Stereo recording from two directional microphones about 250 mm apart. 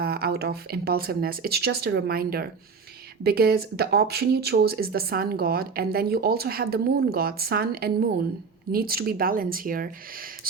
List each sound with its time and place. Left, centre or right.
0.0 s speech: right